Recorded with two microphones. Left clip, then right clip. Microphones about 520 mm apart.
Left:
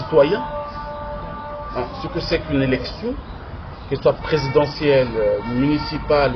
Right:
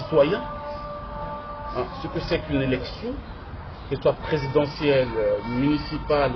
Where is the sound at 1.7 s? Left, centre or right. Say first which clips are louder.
Left 3 dB; right.